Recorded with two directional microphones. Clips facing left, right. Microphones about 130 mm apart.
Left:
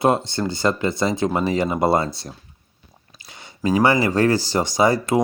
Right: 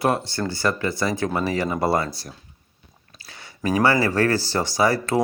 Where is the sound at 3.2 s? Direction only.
20° left (ahead or behind).